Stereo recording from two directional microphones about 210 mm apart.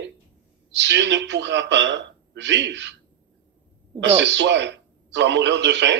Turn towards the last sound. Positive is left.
turn(degrees=-60)  # may be behind; listen again after turning